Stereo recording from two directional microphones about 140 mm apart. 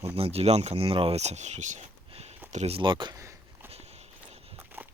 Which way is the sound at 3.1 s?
20° right (ahead or behind).